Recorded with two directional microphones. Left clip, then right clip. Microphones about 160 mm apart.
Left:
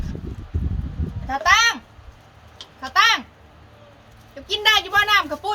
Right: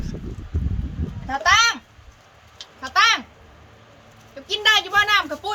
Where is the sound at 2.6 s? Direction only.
Centre (ahead or behind).